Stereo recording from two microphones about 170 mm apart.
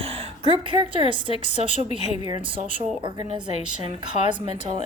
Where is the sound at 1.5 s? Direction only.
40° left (ahead or behind).